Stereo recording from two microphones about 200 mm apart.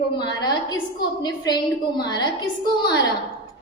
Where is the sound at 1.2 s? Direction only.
20° left (ahead or behind).